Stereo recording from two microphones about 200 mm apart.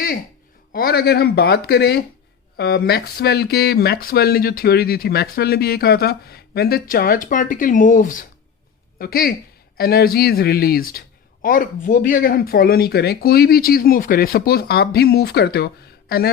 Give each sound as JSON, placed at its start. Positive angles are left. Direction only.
{"t": 0.7, "sound": "speech", "side_deg": 50}